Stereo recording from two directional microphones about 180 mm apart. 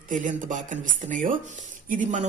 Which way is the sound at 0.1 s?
45° right (ahead or behind).